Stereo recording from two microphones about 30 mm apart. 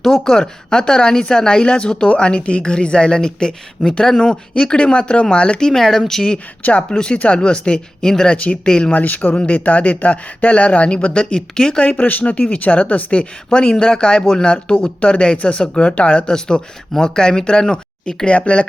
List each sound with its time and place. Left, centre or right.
0.0 s a woman's voice: centre; by 5.6 s left
5.6 s speech: centre
6.6 s speech: left
6.9 s a woman's voice: left
8.6 s speech: left
8.9 s speech: left
9.6 s speech: left
11.9 s speech: left
13.1 s speech: left
14.4 s a woman's voice: left
15.0 s speech: left
16.3 s speech: left
18.3 s a woman's voice: left